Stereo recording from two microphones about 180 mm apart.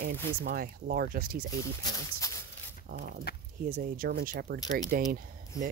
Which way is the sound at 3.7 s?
55° right (ahead or behind).